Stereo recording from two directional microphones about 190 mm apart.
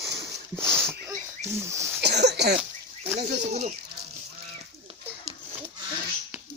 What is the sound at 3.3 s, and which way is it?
Speech, 35° right (ahead or behind).